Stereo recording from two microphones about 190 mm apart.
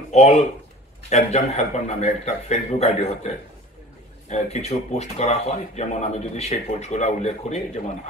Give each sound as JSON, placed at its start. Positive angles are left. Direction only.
{"t": 0.1, "sound": "speech", "side_deg": 35}